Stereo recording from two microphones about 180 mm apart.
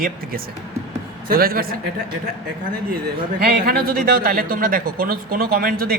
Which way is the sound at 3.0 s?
60° right (ahead or behind).